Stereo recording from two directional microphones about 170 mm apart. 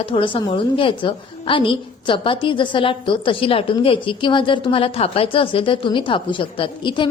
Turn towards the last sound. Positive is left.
turn(degrees=30)  # may be behind; listen again after turning